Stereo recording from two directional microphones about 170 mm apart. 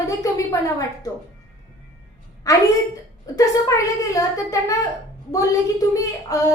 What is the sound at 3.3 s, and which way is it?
A woman's voice, 20° left (ahead or behind).